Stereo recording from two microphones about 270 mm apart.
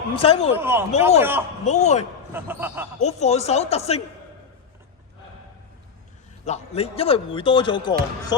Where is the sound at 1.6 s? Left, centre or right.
Left.